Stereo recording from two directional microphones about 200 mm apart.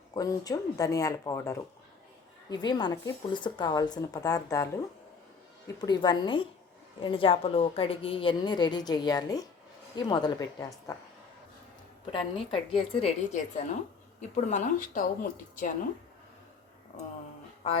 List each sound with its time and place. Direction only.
0.1 s a woman's voice: 20° left (ahead or behind)
5.8 s a woman's voice: 20° left (ahead or behind)
12.1 s a woman's voice: 25° left (ahead or behind); by 15.7 s 45° left (ahead or behind)